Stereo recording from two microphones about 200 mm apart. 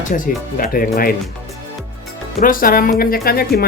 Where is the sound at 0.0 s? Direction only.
40° left (ahead or behind).